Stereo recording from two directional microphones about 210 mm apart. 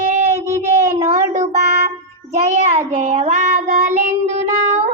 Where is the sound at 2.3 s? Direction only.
35° right (ahead or behind).